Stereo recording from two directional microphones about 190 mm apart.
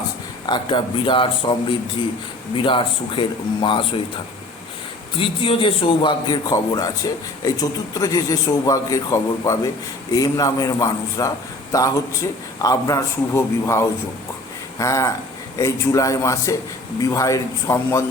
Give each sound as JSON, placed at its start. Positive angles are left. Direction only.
{"t": 0.4, "sound": "a man's voice", "side_deg": 25}
{"t": 5.1, "sound": "a man's voice", "side_deg": 30}